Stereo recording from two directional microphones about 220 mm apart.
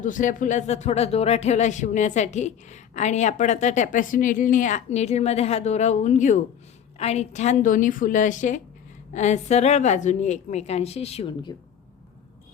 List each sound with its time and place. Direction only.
0.0 s speech: 35° left (ahead or behind)